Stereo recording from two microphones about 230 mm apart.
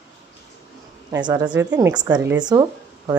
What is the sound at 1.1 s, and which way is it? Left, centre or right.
A woman's voice, centre.